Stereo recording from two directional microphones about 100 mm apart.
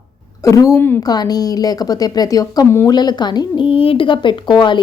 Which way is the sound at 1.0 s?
40° left (ahead or behind).